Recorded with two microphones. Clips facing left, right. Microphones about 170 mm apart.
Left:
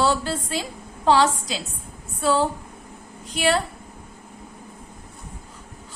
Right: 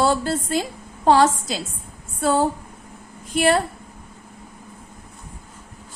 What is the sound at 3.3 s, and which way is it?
Speech, 50° right (ahead or behind).